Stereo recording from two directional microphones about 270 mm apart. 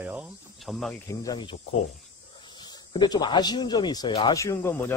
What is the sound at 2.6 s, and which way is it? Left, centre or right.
Speech, centre.